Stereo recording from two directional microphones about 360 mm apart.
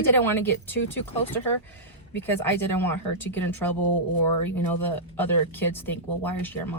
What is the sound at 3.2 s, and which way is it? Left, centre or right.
Speech, centre.